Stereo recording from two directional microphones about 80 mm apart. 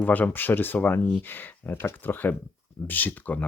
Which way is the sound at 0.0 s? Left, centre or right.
Left.